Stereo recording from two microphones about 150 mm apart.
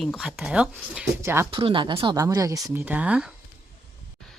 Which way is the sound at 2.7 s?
10° right (ahead or behind).